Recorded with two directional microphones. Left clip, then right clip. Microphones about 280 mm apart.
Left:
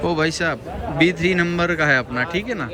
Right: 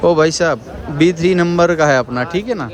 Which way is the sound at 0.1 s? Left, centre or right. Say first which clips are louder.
Right 8 dB; right.